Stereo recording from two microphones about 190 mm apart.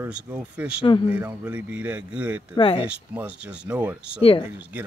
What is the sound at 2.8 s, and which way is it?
Speech, 5° right (ahead or behind).